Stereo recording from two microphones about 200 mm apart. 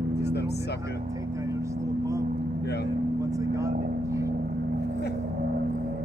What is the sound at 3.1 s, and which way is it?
Vehicle, 15° right (ahead or behind).